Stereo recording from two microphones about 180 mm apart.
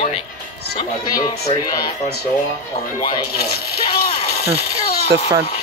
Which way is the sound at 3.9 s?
60° left (ahead or behind).